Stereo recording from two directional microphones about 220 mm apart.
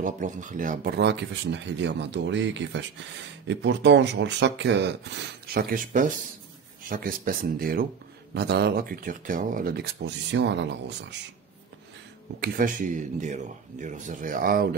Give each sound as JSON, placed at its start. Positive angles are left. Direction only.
{"t": 0.0, "sound": "speech", "side_deg": -35}
{"t": 5.5, "sound": "speech", "side_deg": -40}
{"t": 12.4, "sound": "speech", "side_deg": -40}